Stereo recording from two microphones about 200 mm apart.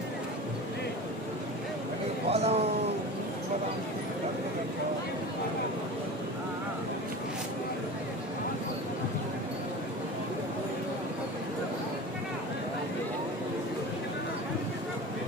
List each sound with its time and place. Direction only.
2.3 s speech: 30° right (ahead or behind)